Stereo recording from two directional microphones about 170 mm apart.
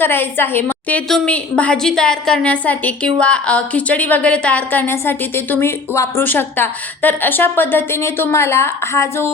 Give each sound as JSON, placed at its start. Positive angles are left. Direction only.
{"t": 0.0, "sound": "a woman's voice", "side_deg": 10}